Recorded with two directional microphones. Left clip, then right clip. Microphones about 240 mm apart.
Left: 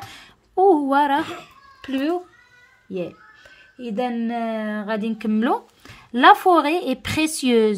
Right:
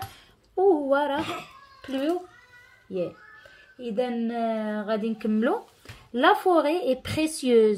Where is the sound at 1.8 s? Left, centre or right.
Left.